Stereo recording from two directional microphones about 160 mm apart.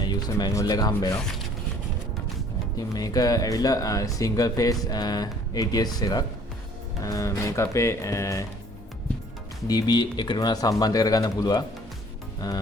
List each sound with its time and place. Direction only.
0.0 s speech: 25° left (ahead or behind)
2.7 s speech: 25° left (ahead or behind)
9.6 s speech: 25° left (ahead or behind)